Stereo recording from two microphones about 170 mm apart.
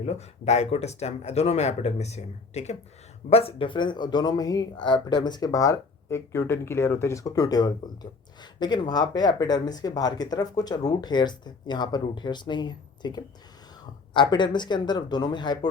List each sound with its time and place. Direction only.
0.0 s speech: 40° left (ahead or behind)